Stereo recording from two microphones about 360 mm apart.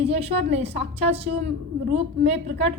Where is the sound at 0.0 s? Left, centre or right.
Centre.